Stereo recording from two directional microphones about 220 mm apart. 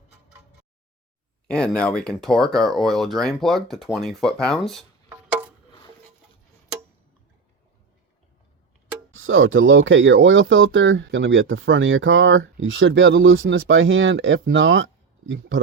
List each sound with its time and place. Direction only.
1.5 s speech: 5° left (ahead or behind)
5.0 s a sound: 5° right (ahead or behind)
9.1 s speech: 65° right (ahead or behind)